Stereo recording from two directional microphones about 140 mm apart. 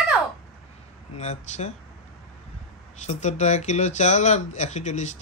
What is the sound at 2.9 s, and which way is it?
Speech, 55° left (ahead or behind).